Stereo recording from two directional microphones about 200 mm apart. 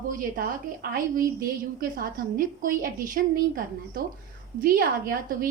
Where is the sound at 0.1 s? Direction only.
45° right (ahead or behind).